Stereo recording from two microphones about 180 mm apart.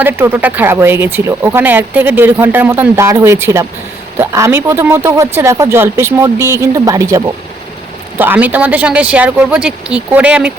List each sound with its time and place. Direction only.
0.0 s speech: 10° right (ahead or behind)